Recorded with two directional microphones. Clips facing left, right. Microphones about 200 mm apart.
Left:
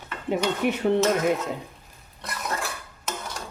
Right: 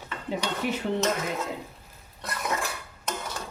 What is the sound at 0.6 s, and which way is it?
Speech, 60° left (ahead or behind).